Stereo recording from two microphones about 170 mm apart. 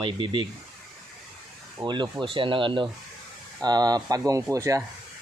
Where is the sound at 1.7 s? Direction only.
25° right (ahead or behind).